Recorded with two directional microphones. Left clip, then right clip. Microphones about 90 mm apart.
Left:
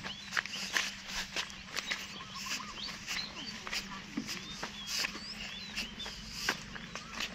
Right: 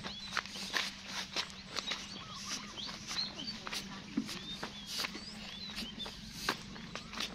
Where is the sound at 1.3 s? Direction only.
5° right (ahead or behind).